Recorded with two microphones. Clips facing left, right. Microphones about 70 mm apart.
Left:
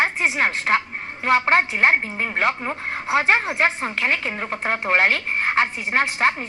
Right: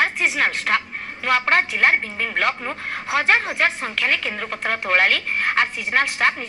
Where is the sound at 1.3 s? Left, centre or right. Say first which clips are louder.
Left 1 dB; left.